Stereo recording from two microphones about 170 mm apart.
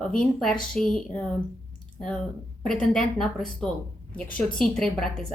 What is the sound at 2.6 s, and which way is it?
Speech, 5° left (ahead or behind).